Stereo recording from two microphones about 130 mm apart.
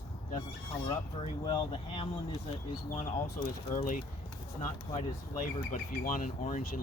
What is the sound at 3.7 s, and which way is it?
Speech, 85° left.